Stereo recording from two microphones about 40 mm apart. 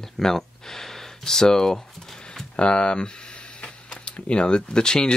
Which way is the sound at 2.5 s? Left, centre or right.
Left.